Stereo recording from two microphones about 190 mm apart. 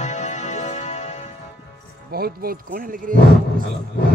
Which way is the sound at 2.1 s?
55° right (ahead or behind).